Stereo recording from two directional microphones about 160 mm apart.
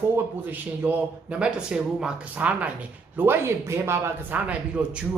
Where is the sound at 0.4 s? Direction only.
10° right (ahead or behind).